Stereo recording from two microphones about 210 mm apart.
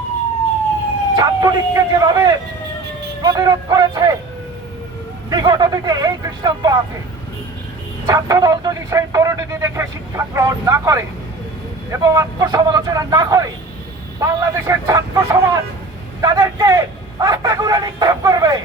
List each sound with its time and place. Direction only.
1.1 s speech: 20° right (ahead or behind)
5.3 s speech: 20° right (ahead or behind)
8.0 s speech: 15° right (ahead or behind)